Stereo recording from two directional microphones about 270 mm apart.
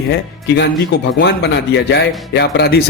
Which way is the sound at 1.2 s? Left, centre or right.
Left.